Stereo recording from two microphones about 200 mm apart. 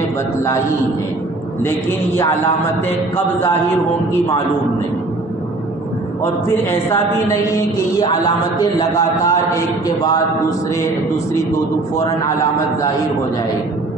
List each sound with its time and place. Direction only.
8.5 s a man's voice: 20° left (ahead or behind)